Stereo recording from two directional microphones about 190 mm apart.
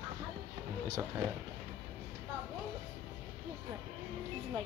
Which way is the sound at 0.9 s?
15° right (ahead or behind).